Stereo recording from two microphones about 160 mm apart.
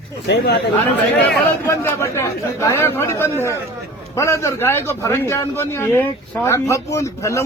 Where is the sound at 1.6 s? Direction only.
15° left (ahead or behind).